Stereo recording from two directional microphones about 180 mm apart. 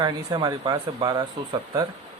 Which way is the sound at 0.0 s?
20° right (ahead or behind).